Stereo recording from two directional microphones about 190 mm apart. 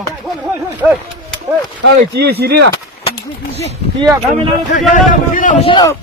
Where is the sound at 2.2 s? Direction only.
55° right (ahead or behind).